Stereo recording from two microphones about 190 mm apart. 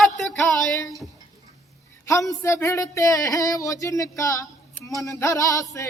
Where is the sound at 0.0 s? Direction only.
Centre (ahead or behind).